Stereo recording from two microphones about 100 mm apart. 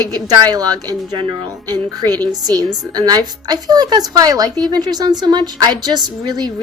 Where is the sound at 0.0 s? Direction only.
40° right (ahead or behind).